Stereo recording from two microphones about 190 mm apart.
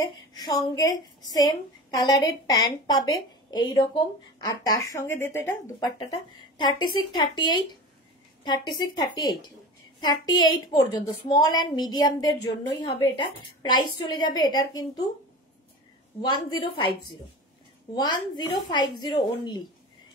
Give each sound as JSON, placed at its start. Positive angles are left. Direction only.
{"t": 0.0, "sound": "a woman's voice", "side_deg": 20}
{"t": 16.2, "sound": "a woman's voice", "side_deg": 20}